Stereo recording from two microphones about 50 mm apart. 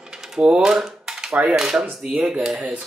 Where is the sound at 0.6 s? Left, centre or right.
Centre.